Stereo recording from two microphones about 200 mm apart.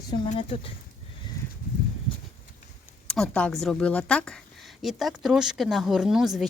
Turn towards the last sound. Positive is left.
turn(degrees=0)  # may be behind; listen again after turning